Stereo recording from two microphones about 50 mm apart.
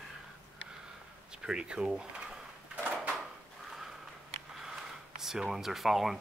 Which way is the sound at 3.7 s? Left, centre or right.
Centre.